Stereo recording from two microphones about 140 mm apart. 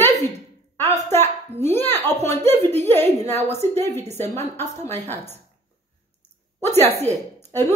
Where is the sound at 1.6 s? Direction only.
15° left (ahead or behind).